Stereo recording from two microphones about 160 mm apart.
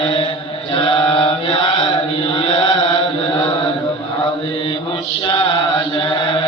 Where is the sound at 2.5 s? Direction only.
25° left (ahead or behind).